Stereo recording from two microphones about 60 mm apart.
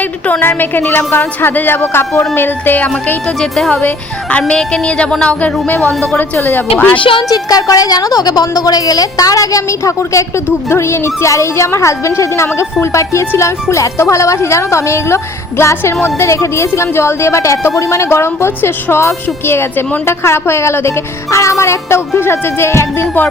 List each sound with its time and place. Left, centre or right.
0.3 s a woman's voice: left
3.2 s a woman's voice: centre; by 7.0 s left
7.3 s a woman's voice: left